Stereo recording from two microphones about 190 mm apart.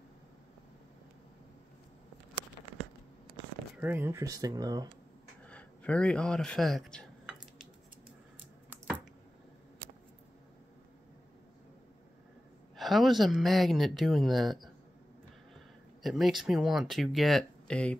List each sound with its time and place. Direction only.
3.7 s speech: 10° right (ahead or behind)
5.5 s speech: 5° left (ahead or behind)
8.6 s a sound: 10° right (ahead or behind)
12.7 s speech: centre (ahead or behind)
16.0 s speech: centre (ahead or behind)